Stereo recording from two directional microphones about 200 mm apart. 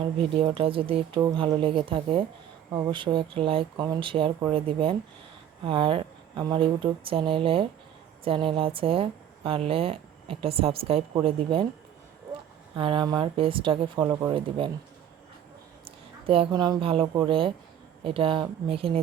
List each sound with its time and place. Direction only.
0.0 s speech: 25° right (ahead or behind)
12.7 s speech: 25° right (ahead or behind)
16.2 s speech: 25° right (ahead or behind)